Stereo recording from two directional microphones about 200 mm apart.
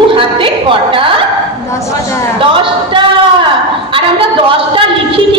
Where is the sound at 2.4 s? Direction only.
25° right (ahead or behind).